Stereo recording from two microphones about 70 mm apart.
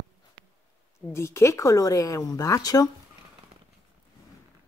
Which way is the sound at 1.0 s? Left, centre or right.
Left.